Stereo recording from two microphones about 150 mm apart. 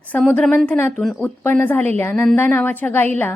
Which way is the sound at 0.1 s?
10° left (ahead or behind).